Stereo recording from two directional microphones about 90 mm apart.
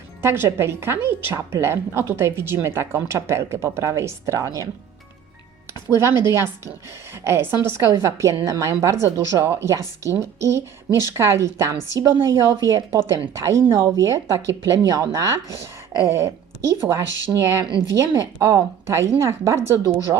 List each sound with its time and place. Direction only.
0.2 s a woman's voice: 25° right (ahead or behind)
5.9 s speech: 30° right (ahead or behind)
7.3 s a woman's voice: 30° right (ahead or behind)